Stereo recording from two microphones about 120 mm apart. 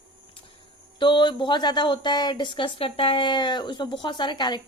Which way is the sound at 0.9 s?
40° left (ahead or behind).